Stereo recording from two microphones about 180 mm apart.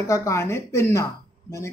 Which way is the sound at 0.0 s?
15° left (ahead or behind).